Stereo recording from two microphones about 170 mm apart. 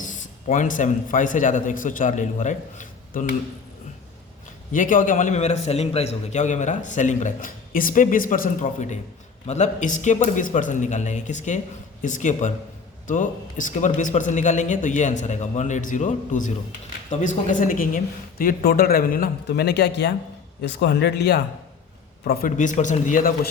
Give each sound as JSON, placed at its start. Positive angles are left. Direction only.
{"t": 0.0, "sound": "a man's voice", "side_deg": 50}
{"t": 4.7, "sound": "a man's voice", "side_deg": 55}
{"t": 22.2, "sound": "a man's voice", "side_deg": 65}